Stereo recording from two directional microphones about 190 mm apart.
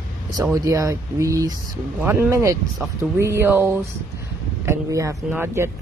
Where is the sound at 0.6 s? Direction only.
15° right (ahead or behind).